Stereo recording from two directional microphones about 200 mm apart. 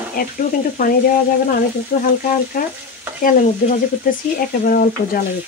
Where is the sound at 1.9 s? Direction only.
40° left (ahead or behind).